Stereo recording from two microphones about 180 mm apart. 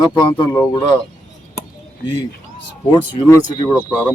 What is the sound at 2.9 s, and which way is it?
Speech, 25° left (ahead or behind).